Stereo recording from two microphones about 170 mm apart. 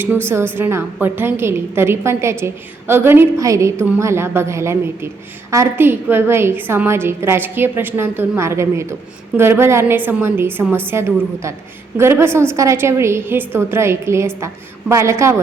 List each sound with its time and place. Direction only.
0.3 s a woman's voice: 15° right (ahead or behind)